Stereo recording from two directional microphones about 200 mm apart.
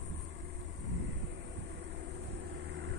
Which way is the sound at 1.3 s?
60° right (ahead or behind).